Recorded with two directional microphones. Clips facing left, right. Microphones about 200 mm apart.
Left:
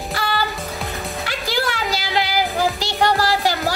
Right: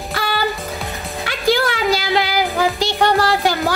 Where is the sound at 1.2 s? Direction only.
55° right (ahead or behind).